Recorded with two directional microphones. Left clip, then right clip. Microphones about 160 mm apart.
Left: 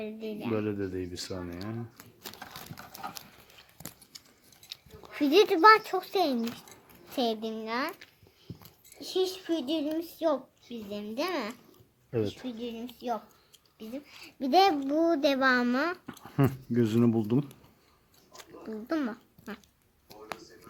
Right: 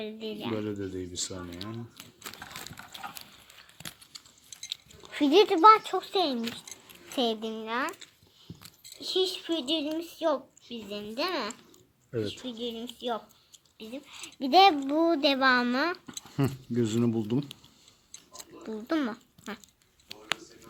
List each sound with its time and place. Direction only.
0.0 s a child's voice: 5° right (ahead or behind); by 1.7 s 10° left (ahead or behind)
2.2 s a sound: 40° left (ahead or behind)
5.1 s speech: 10° right (ahead or behind)
5.5 s a child's voice: centre (ahead or behind)
7.2 s a child's voice: 10° right (ahead or behind)
12.4 s speech: 15° right (ahead or behind)
13.7 s speech: 10° right (ahead or behind)
14.4 s a child's voice: centre (ahead or behind)
16.2 s speech: 10° left (ahead or behind)
18.6 s speech: 15° right (ahead or behind)